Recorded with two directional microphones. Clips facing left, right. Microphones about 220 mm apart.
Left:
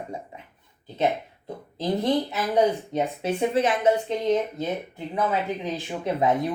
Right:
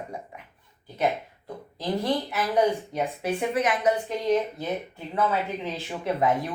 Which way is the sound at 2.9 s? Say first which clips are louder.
Left 2 dB; 25° left (ahead or behind).